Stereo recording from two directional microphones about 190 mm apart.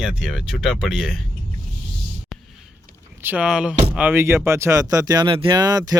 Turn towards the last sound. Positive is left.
turn(degrees=-20)  # may be behind; listen again after turning